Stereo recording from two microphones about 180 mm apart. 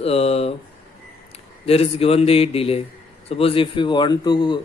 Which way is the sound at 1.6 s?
35° left (ahead or behind).